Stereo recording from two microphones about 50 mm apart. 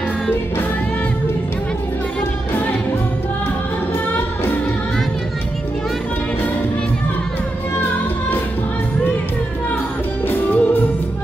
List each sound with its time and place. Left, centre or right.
10.2 s music: left